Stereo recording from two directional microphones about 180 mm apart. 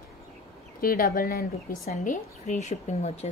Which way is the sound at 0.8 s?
55° left (ahead or behind).